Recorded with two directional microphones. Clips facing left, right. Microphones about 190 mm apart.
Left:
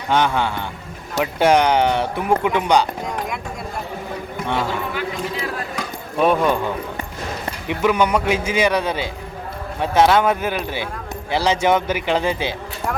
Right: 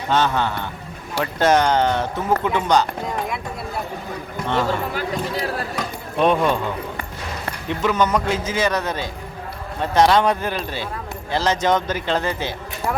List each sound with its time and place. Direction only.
0.1 s speech: 10° left (ahead or behind)
3.0 s speech: centre (ahead or behind)
4.9 s speech: 40° right (ahead or behind)
5.7 s keys jangling: 5° left (ahead or behind)
7.7 s speech: 10° left (ahead or behind)